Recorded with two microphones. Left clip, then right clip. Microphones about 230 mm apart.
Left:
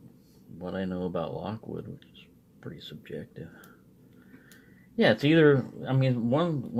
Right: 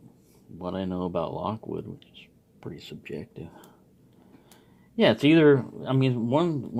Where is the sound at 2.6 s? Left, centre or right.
Right.